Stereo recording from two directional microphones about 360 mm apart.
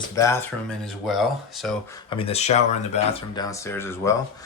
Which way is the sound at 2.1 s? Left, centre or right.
Centre.